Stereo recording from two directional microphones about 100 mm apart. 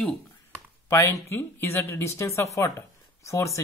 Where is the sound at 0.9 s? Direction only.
30° left (ahead or behind).